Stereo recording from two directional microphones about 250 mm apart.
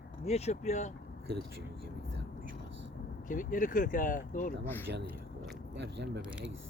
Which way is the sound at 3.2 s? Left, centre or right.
Left.